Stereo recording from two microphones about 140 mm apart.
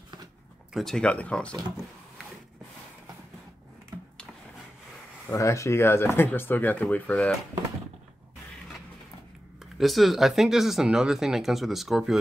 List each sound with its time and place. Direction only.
0.7 s speech: 5° left (ahead or behind)
5.3 s speech: 20° left (ahead or behind)
9.8 s speech: centre (ahead or behind)